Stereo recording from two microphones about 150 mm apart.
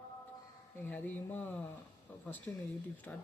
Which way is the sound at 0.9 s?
10° left (ahead or behind).